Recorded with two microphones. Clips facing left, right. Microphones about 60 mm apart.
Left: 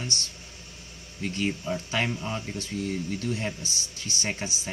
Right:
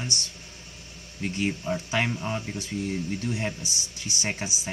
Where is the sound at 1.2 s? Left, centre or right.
Centre.